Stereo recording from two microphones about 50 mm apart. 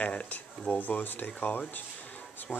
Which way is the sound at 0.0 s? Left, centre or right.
Left.